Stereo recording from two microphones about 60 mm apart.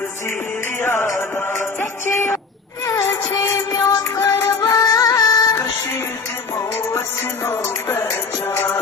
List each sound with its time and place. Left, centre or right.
0.8 s music: left
2.8 s music: left
4.3 s music: left
4.6 s music: left
7.4 s music: left